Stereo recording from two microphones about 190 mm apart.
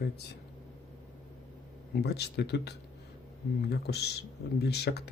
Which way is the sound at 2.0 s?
60° left (ahead or behind).